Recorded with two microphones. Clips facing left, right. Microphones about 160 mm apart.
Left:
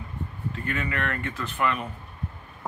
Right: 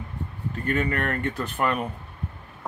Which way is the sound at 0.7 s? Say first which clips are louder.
Right 5 dB; 40° right (ahead or behind).